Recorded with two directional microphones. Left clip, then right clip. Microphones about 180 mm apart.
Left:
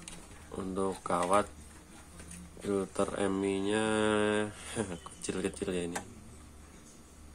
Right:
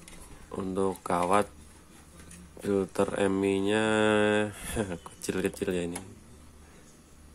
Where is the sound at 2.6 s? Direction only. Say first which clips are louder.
Right 4 dB; 30° right (ahead or behind).